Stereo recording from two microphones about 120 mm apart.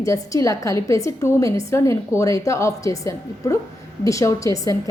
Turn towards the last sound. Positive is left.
turn(degrees=25)  # may be behind; listen again after turning